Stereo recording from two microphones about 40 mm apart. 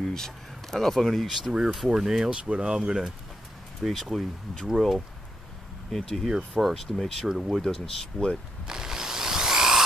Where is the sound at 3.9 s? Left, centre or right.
Centre.